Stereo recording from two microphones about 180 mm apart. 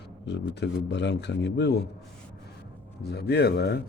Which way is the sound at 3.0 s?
65° left (ahead or behind).